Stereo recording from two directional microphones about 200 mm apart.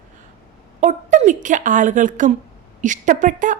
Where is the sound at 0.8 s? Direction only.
40° right (ahead or behind).